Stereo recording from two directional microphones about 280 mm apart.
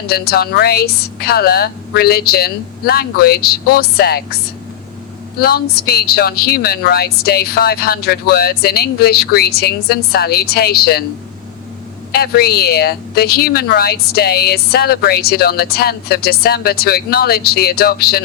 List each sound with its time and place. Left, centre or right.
0.1 s a woman's voice: left
5.4 s a woman's voice: left
12.1 s a woman's voice: left